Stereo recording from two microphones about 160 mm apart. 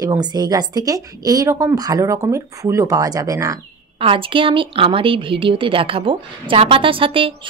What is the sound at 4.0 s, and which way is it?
Speech, 35° right (ahead or behind).